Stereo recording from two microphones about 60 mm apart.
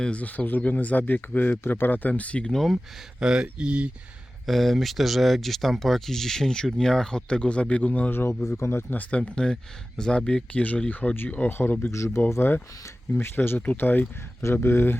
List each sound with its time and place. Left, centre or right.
0.0 s speech: left
2.5 s speech: centre
3.2 s speech: centre
4.4 s speech: centre; by 8.1 s left
8.1 s speech: left
8.4 s speech: left
8.9 s speech: left
11.4 s speech: left
11.9 s speech: left
12.3 s speech: left
13.6 s speech: left
14.4 s speech: left